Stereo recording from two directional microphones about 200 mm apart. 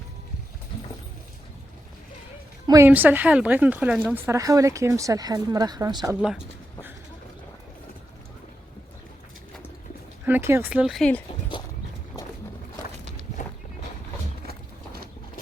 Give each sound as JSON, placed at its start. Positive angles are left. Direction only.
{"t": 2.6, "sound": "a woman's voice", "side_deg": -15}
{"t": 10.2, "sound": "a woman's voice", "side_deg": -10}